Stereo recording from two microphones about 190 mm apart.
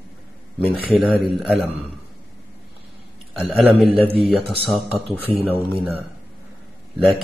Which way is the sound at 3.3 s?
Centre (ahead or behind).